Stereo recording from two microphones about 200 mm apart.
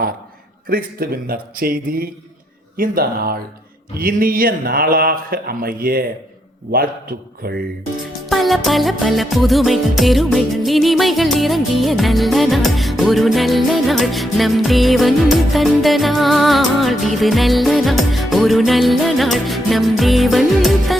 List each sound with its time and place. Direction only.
0.7 s speech: 45° right (ahead or behind)
8.3 s music: centre (ahead or behind)